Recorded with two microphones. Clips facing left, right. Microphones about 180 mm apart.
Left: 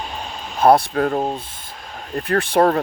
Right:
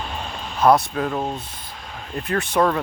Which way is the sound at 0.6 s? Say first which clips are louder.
Left 2 dB; 30° left (ahead or behind).